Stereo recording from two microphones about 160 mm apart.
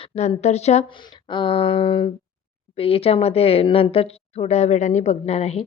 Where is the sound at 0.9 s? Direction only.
30° left (ahead or behind).